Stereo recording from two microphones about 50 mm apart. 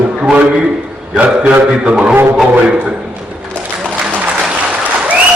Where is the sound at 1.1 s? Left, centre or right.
Right.